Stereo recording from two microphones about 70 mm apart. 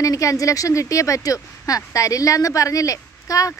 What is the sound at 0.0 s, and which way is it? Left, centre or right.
Speech, left.